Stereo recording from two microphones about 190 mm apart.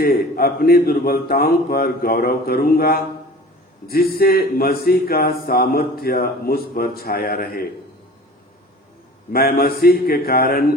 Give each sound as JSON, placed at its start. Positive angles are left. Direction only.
{"t": 0.0, "sound": "speech", "side_deg": 50}
{"t": 9.3, "sound": "speech", "side_deg": 50}